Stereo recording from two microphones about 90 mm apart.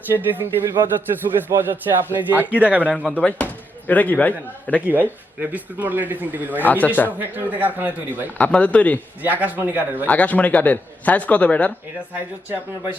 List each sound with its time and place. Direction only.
0.1 s a man's voice: 25° right (ahead or behind)
3.1 s speech: 15° left (ahead or behind)
4.9 s a man's voice: 20° right (ahead or behind)
6.8 s speech: 20° left (ahead or behind)
7.2 s a man's voice: 20° right (ahead or behind)
8.4 s a man's voice: 15° left (ahead or behind)
9.2 s a man's voice: 20° right (ahead or behind)
10.1 s a man's voice: 15° left (ahead or behind)